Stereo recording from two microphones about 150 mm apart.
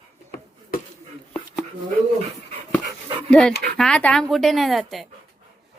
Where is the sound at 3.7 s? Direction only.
5° left (ahead or behind).